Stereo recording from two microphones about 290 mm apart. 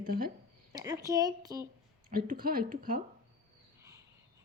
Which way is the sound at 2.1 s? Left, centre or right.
Right.